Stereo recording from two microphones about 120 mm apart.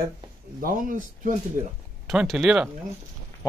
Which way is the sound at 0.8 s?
90° right.